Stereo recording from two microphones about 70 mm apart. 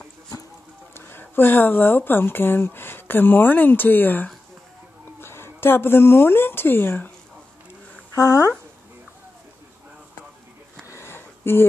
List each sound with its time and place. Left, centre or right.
0.9 s speech: left
8.1 s speech: left
11.0 s a sound: left